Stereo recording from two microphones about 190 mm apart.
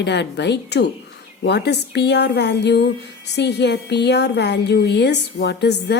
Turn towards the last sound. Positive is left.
turn(degrees=60)  # may be behind; listen again after turning